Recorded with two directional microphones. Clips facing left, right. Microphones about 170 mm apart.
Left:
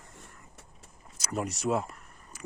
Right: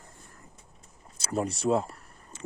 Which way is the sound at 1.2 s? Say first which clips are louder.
Right 3 dB; 30° right (ahead or behind).